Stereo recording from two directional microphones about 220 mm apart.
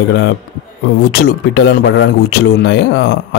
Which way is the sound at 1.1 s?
50° left (ahead or behind).